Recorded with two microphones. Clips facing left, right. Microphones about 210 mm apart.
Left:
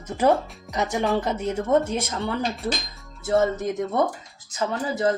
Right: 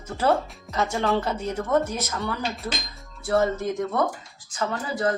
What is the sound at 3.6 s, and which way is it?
Speech, 20° left (ahead or behind).